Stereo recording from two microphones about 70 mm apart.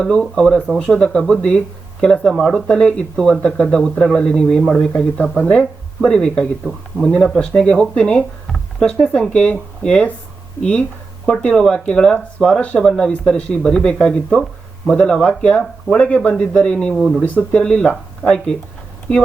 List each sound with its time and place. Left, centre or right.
0.0 s speech: centre
16.9 s speech: centre
17.2 s speech: centre
19.1 s speech: centre